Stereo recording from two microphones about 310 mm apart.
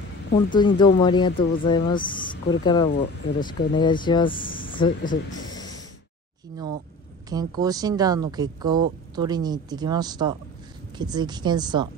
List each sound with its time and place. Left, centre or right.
0.5 s speech: centre
2.9 s speech: left
3.4 s speech: centre
5.5 s a sound: centre
6.5 s vehicle: centre
7.2 s speech: centre